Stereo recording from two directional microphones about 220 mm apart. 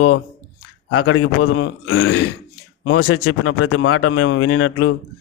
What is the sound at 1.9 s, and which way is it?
Speech, 65° left (ahead or behind).